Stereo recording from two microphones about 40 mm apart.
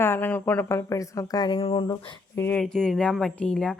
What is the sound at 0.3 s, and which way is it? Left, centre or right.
Speech, left.